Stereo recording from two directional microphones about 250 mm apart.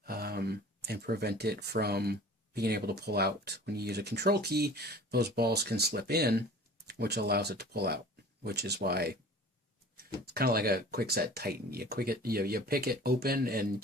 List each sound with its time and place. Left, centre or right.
0.0 s speech: right
10.2 s speech: right